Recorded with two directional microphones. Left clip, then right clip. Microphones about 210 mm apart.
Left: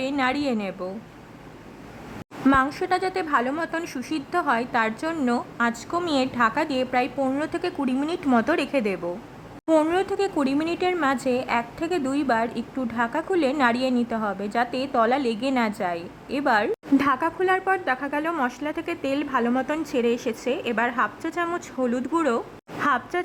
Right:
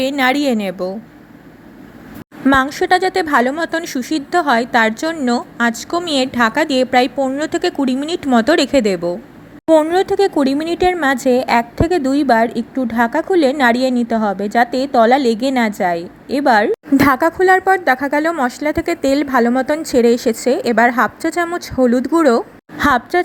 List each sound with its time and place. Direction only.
0.0 s a woman's voice: 20° right (ahead or behind)
2.5 s a woman's voice: 20° right (ahead or behind)